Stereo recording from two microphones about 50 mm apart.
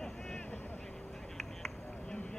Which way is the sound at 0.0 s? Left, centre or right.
Centre.